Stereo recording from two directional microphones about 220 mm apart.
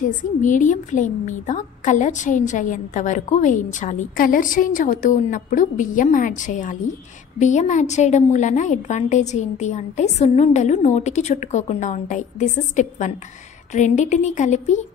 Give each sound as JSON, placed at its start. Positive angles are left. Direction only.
{"t": 0.2, "sound": "a woman's voice", "side_deg": 35}